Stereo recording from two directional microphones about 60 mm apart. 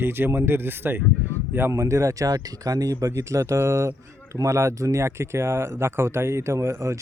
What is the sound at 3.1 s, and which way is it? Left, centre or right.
Speech, right.